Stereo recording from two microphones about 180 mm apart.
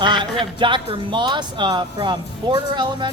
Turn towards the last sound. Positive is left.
turn(degrees=-25)  # may be behind; listen again after turning